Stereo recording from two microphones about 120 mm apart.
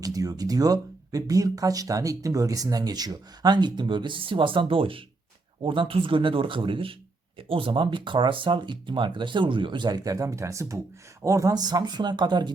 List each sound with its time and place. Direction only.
0.0 s speech: 30° right (ahead or behind)